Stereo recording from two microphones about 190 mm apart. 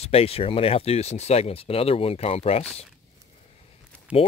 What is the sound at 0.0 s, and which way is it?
Speech, 30° left (ahead or behind).